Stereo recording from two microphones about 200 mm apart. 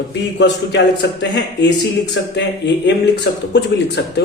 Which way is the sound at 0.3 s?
60° left (ahead or behind).